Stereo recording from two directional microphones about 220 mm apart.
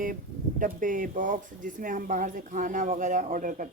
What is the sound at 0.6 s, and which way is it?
Speech, 35° right (ahead or behind).